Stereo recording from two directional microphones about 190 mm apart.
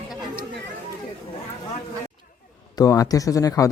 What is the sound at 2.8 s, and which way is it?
Speech, 20° left (ahead or behind).